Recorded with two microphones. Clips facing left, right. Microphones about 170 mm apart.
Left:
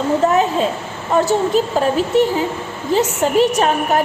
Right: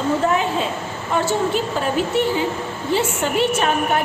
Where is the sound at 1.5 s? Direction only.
40° left (ahead or behind).